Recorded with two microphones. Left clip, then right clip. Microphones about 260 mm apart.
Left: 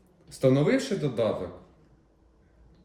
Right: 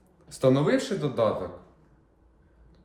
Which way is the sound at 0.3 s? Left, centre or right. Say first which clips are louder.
Right 1 dB; centre.